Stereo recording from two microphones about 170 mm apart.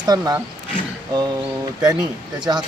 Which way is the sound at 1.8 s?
25° right (ahead or behind).